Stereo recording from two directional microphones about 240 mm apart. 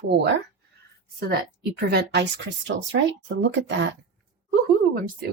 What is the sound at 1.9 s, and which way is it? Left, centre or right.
A woman's voice, right.